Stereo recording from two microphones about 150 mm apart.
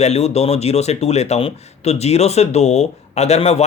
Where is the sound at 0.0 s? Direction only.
45° left (ahead or behind).